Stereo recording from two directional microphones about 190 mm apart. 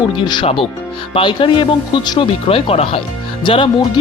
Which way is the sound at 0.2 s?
25° left (ahead or behind).